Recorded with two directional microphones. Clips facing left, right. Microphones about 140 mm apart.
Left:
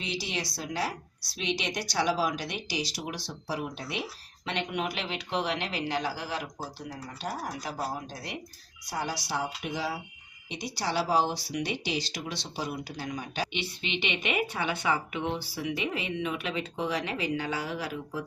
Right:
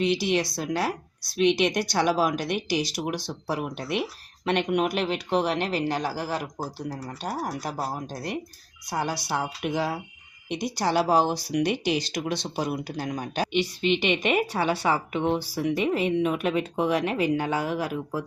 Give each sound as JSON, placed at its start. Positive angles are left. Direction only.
{"t": 0.0, "sound": "speech", "side_deg": -60}